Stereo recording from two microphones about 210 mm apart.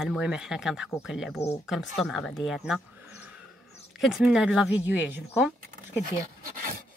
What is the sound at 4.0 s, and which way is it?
A woman's voice, centre (ahead or behind).